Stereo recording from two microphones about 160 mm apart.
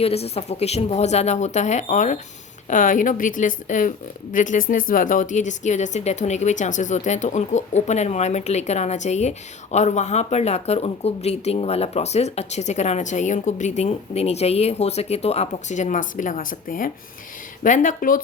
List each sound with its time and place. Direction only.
0.0 s speech: 40° left (ahead or behind); by 18.2 s 55° left (ahead or behind)